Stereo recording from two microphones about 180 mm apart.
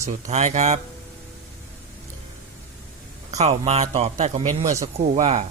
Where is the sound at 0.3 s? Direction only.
40° right (ahead or behind).